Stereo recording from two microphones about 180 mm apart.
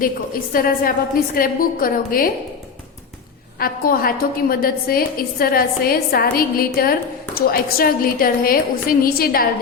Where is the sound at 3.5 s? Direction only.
55° left (ahead or behind).